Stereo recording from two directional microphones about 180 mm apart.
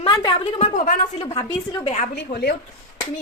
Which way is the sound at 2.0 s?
60° left (ahead or behind).